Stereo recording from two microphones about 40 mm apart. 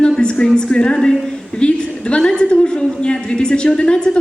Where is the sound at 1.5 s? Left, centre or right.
Left.